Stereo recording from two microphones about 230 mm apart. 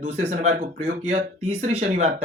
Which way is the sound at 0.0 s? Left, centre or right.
Right.